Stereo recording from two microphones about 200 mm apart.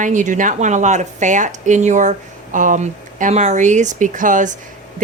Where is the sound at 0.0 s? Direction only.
40° right (ahead or behind).